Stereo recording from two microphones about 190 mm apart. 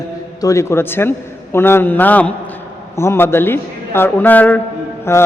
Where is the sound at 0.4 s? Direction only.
15° left (ahead or behind).